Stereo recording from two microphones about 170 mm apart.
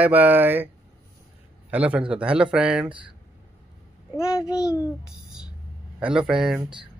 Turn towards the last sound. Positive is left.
turn(degrees=-5)  # may be behind; listen again after turning